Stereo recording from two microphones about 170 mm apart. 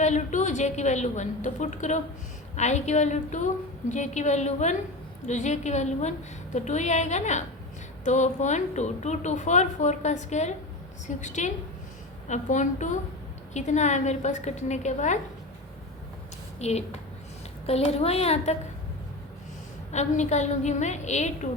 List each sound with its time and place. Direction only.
0.0 s a woman's voice: 45° left (ahead or behind)
16.6 s a woman's voice: 40° left (ahead or behind)
19.9 s a woman's voice: 40° left (ahead or behind)